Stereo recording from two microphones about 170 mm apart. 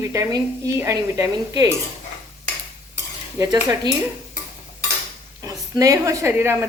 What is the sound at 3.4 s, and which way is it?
Speech, 25° right (ahead or behind).